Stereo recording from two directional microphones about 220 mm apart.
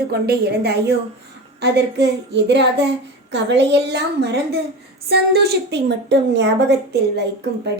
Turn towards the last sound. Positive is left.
turn(degrees=-50)  # may be behind; listen again after turning